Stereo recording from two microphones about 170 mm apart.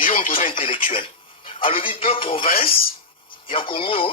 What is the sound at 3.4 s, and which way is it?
Speech, 30° left (ahead or behind).